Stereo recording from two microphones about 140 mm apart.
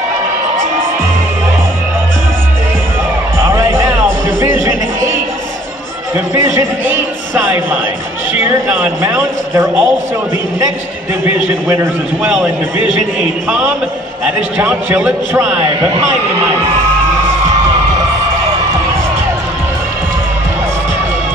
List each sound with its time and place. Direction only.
3.3 s music: 20° right (ahead or behind)
6.9 s a sound: 15° right (ahead or behind)
8.4 s a man's voice: 15° right (ahead or behind)
11.2 s a man's voice: 15° right (ahead or behind)
14.2 s a man's voice: 10° right (ahead or behind)